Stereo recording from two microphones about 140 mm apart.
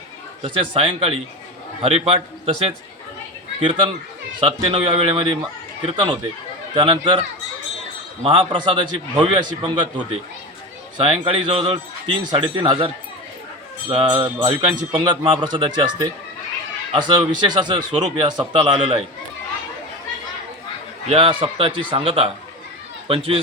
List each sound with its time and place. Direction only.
0.4 s a man's voice: 35° right (ahead or behind)
3.6 s speech: 35° right (ahead or behind)
8.2 s speech: 35° right (ahead or behind)
13.9 s speech: 35° right (ahead or behind)
21.1 s speech: 40° right (ahead or behind)